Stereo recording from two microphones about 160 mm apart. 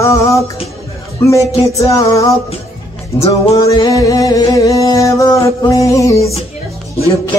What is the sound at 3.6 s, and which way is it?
Music, 20° left (ahead or behind).